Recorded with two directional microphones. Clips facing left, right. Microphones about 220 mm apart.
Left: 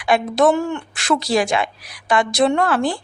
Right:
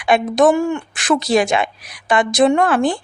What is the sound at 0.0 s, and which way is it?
A woman's voice, 20° right (ahead or behind).